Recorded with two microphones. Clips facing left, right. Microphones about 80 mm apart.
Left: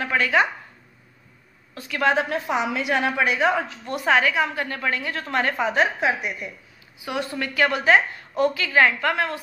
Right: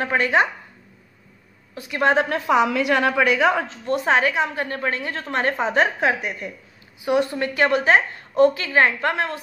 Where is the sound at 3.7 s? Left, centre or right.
Right.